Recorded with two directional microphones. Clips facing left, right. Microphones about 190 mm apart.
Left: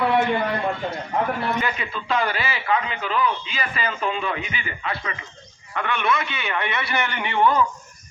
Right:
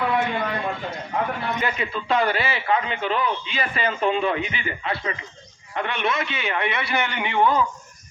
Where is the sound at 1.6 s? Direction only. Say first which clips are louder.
Right 2 dB; 30° right (ahead or behind); by 7.4 s 15° right (ahead or behind).